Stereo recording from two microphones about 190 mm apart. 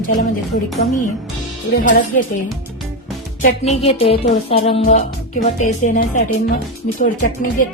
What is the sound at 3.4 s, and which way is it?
Music, 35° left (ahead or behind).